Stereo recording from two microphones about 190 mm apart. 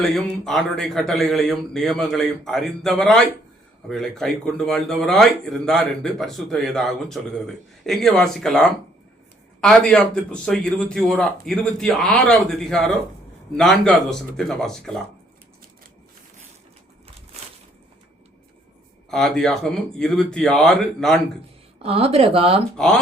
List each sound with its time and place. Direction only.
0.0 s a man's voice: centre (ahead or behind)
19.1 s a man's voice: 5° left (ahead or behind)
21.8 s speech: 30° right (ahead or behind)